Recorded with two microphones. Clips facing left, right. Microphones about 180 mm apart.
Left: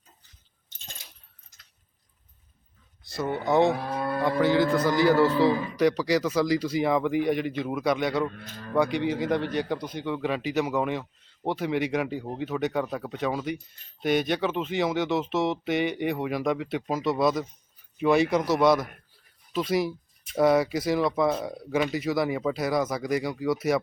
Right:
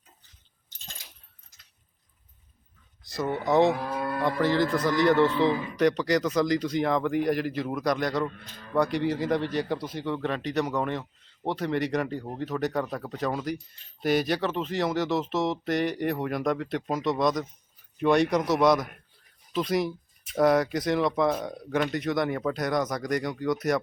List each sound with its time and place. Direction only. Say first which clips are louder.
3.0 s speech: even; centre (ahead or behind)
3.7 s speech: left 1 dB; 30° left (ahead or behind)
4.4 s speech: left 3 dB; centre (ahead or behind)
5.2 s speech: left 2 dB; 35° left (ahead or behind)
5.7 s speech: even; 5° left (ahead or behind)